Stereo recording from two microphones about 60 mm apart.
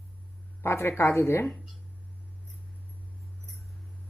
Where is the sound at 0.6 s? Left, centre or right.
Left.